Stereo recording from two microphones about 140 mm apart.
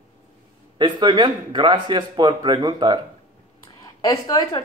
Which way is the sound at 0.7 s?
35° right (ahead or behind).